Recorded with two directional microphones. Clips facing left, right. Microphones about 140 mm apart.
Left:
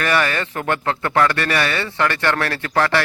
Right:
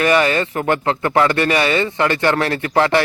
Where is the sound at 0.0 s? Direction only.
20° right (ahead or behind).